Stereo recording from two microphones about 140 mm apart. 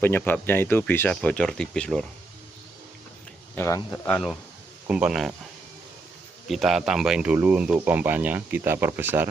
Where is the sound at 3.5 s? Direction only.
20° left (ahead or behind).